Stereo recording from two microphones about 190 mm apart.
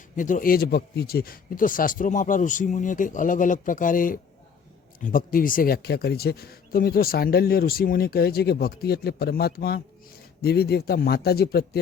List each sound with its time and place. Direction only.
0.2 s speech: 45° left (ahead or behind)